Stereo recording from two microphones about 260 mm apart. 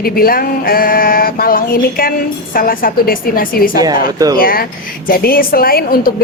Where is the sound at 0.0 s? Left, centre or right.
Left.